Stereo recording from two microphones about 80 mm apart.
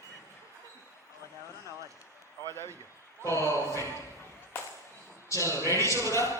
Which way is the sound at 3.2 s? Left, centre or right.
Left.